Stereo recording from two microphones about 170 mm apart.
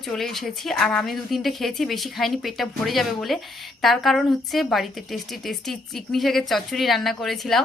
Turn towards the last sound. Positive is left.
turn(degrees=0)  # may be behind; listen again after turning